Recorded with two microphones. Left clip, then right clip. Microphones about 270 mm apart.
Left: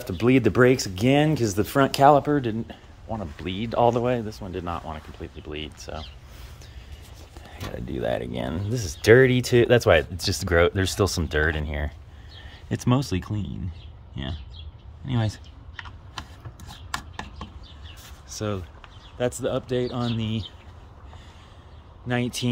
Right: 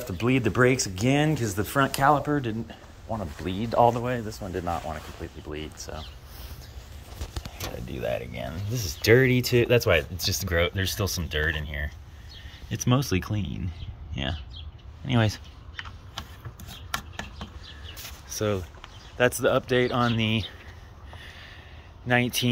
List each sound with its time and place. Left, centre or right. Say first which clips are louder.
0.0 s speech: left 5 dB; centre
4.3 s speech: right 1 dB; centre
7.9 s speech: left 4 dB; left
8.8 s speech: left 4 dB; centre
12.6 s speech: left 1 dB; centre
15.0 s speech: right 5 dB; centre
18.3 s speech: right 3 dB; centre
22.0 s speech: right 4 dB; centre